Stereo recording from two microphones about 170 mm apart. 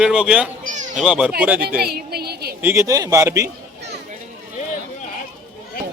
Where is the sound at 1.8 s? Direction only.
70° right (ahead or behind).